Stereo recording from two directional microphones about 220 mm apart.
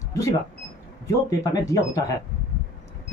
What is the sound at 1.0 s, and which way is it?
Speech, 15° left (ahead or behind).